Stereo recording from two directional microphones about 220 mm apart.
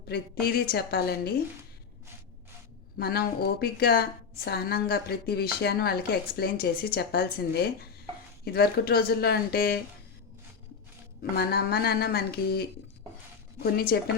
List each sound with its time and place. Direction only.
0.1 s a woman's voice: 45° left (ahead or behind)
3.0 s a woman's voice: 45° left (ahead or behind)
11.2 s a woman's voice: 45° left (ahead or behind)